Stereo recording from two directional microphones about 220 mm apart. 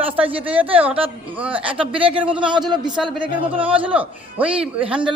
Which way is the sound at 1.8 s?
25° right (ahead or behind).